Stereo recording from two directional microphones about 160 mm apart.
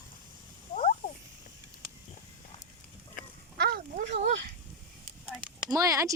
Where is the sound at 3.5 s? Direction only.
70° right (ahead or behind).